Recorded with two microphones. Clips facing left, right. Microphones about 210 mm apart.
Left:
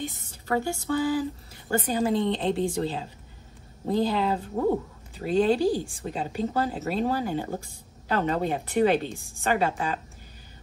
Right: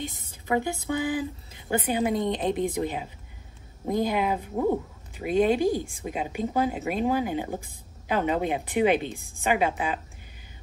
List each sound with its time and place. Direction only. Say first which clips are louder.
0.5 s speech: even; 15° right (ahead or behind)